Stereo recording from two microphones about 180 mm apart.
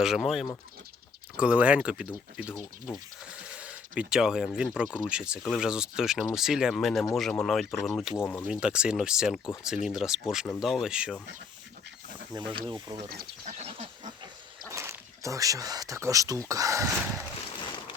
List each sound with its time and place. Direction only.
0.0 s speech: centre (ahead or behind)
8.1 s speech: 10° left (ahead or behind)
8.4 s speech: 5° right (ahead or behind)
12.3 s speech: 25° right (ahead or behind)
13.4 s goat: 40° right (ahead or behind)
14.7 s speech: 15° right (ahead or behind)